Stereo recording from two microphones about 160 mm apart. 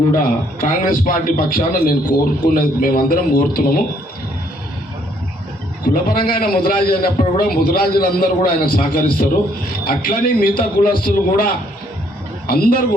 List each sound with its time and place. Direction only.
0.6 s a man's voice: 60° left (ahead or behind)
5.8 s a man's voice: 65° left (ahead or behind)